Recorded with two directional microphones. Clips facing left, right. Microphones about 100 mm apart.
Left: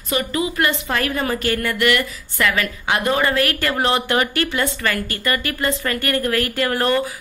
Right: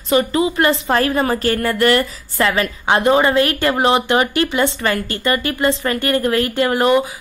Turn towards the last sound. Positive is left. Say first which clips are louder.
# right 4 dB
turn(degrees=-15)  # may be behind; listen again after turning